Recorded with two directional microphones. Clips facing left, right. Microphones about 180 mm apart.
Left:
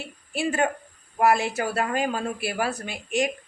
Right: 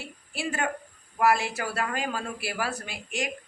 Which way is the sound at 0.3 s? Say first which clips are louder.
Left 6 dB; 20° left (ahead or behind).